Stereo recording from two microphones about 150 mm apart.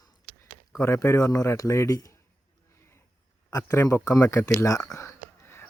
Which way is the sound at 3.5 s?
20° left (ahead or behind).